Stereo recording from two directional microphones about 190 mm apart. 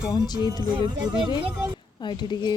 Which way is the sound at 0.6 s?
25° right (ahead or behind).